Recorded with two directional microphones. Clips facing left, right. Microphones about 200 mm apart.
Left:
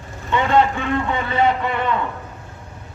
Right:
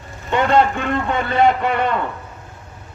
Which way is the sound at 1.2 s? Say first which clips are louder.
Right 5 dB; 80° right.